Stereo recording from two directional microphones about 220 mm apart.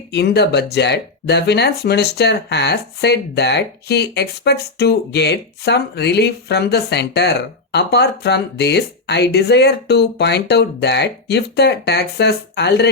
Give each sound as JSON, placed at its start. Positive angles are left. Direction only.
{"t": 0.1, "sound": "speech", "side_deg": 50}